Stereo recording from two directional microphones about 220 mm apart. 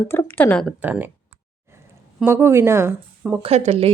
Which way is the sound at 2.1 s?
10° right (ahead or behind).